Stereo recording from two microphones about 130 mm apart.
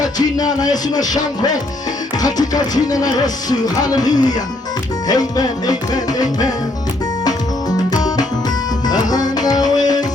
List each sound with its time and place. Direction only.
0.0 s music: 30° left (ahead or behind)
7.9 s music: 30° left (ahead or behind)